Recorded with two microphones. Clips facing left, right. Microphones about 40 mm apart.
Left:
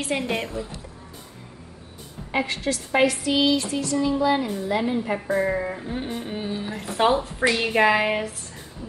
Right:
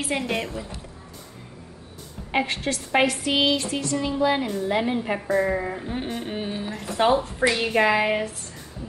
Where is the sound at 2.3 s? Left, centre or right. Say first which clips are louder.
Even; right.